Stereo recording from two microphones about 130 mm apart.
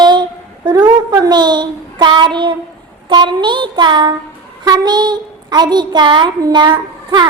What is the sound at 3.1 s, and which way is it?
A woman's voice, 35° right (ahead or behind).